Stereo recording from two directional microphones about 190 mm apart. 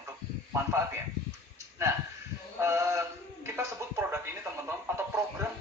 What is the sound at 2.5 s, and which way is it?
Male singing, 15° right (ahead or behind).